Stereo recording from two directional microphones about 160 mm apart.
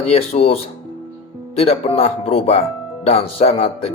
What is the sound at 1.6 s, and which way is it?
Speech, 40° left (ahead or behind).